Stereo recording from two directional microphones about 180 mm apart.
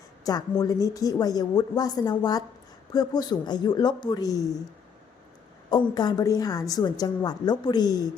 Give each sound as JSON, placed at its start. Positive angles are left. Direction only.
{"t": 0.3, "sound": "a woman's voice", "side_deg": 20}
{"t": 5.7, "sound": "a woman's voice", "side_deg": 25}